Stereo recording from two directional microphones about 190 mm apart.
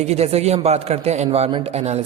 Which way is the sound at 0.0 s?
35° right (ahead or behind).